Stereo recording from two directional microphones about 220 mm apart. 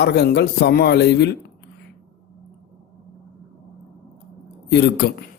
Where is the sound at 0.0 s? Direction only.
50° left (ahead or behind).